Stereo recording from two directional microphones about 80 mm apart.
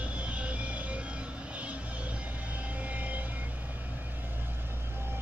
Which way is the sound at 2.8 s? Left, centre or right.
Centre.